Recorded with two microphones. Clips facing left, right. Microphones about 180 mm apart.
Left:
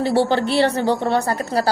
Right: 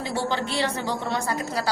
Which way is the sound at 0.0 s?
70° left (ahead or behind).